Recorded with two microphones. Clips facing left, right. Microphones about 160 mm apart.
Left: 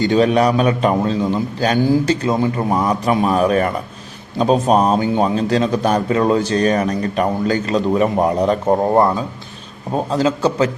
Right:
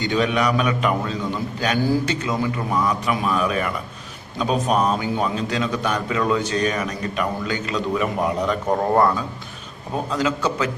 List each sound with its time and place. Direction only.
0.0 s a man's voice: 35° left (ahead or behind)